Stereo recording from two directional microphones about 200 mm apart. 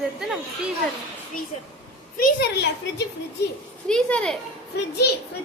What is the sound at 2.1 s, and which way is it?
Speech, 55° left (ahead or behind).